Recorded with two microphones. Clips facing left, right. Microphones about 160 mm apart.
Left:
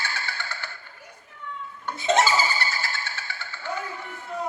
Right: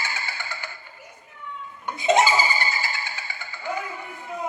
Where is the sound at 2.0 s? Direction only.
10° right (ahead or behind).